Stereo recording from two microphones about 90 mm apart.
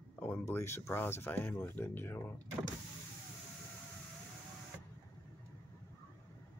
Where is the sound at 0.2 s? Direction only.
25° left (ahead or behind).